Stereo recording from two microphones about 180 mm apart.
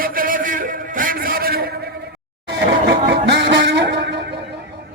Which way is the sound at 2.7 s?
75° right (ahead or behind).